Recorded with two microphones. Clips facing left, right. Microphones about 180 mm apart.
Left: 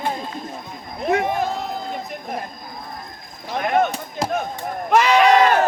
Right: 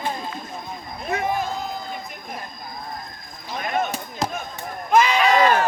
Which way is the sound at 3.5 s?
60° left (ahead or behind).